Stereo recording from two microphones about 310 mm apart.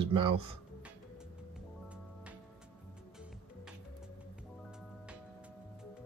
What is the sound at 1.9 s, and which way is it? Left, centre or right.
Music, centre.